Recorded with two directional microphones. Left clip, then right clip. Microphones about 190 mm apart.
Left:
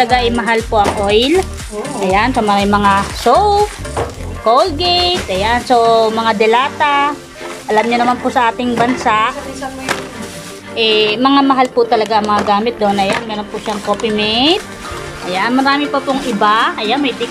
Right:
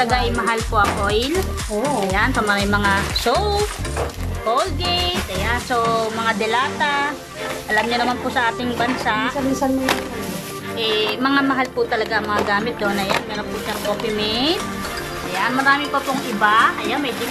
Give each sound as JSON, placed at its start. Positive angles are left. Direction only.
{"t": 0.0, "sound": "speech", "side_deg": 15}
{"t": 10.8, "sound": "a woman's voice", "side_deg": 15}